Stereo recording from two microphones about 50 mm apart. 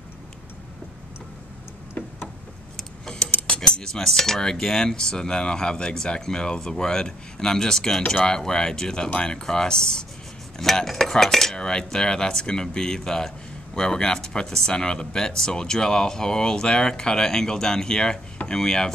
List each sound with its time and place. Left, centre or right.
3.3 s keys jangling: left
3.5 s speech: centre